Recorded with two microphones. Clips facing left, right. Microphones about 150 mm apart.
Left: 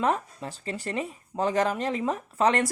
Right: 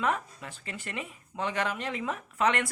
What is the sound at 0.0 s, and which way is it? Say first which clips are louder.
Speech: left 4 dB; 35° left (ahead or behind).